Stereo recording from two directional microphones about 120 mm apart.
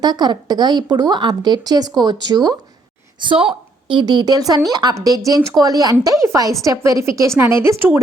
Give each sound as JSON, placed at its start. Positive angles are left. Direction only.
{"t": 0.0, "sound": "a woman's voice", "side_deg": -35}